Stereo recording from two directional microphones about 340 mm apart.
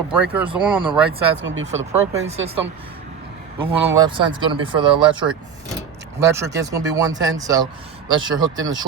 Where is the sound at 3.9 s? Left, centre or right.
Centre.